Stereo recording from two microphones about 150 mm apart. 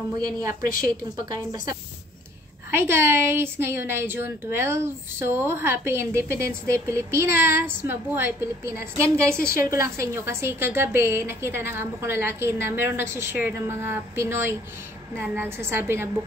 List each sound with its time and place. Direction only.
0.5 s a woman's voice: 70° left (ahead or behind)
2.7 s a woman's voice: 15° right (ahead or behind)